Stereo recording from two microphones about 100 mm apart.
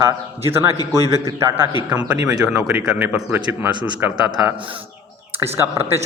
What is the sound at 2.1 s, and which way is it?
Speech, 35° right (ahead or behind).